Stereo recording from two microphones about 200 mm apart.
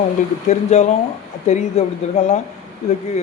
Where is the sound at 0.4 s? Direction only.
35° left (ahead or behind).